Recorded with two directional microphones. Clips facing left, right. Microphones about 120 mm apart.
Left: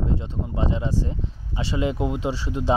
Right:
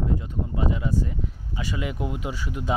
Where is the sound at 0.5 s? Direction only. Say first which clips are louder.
Left 1 dB; 30° left (ahead or behind).